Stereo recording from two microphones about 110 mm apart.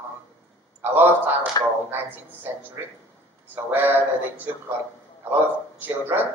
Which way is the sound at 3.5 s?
20° right (ahead or behind).